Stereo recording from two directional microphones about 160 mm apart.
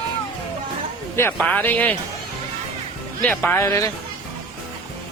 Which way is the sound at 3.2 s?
10° left (ahead or behind).